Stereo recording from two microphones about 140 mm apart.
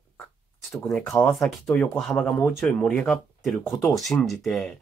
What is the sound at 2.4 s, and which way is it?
Speech, 15° left (ahead or behind).